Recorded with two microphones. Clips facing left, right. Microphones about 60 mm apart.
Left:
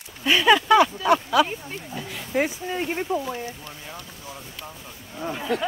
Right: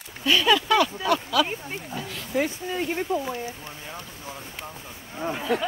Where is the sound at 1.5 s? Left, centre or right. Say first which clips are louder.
Right 1 dB; right.